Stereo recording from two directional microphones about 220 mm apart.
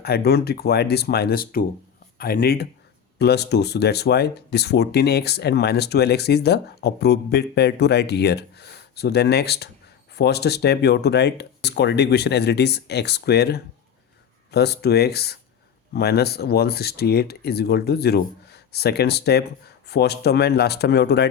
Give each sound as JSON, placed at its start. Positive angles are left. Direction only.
{"t": 0.0, "sound": "speech", "side_deg": 45}